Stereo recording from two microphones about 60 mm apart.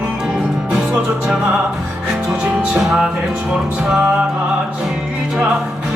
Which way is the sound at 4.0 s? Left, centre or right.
Right.